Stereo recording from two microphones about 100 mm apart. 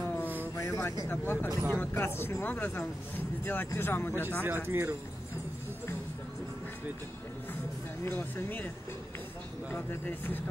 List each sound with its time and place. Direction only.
0.6 s vehicle: 30° left (ahead or behind)
1.0 s speech: 20° left (ahead or behind)
4.6 s speech: 25° right (ahead or behind)
8.0 s speech: 25° left (ahead or behind)
9.7 s speech: 20° left (ahead or behind)